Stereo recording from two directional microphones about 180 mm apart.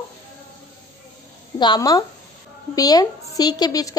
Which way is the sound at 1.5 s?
25° left (ahead or behind).